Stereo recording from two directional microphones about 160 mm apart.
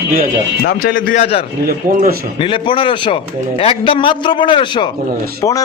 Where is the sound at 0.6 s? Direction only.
65° left (ahead or behind).